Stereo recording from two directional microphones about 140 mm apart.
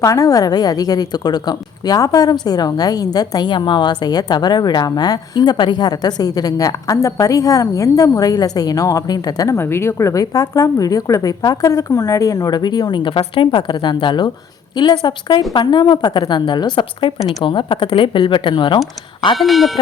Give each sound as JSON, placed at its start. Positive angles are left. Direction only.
{"t": 0.0, "sound": "a woman's voice", "side_deg": 25}
{"t": 19.4, "sound": "speech", "side_deg": 0}